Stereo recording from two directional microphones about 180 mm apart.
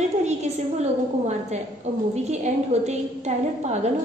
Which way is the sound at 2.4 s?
40° right (ahead or behind).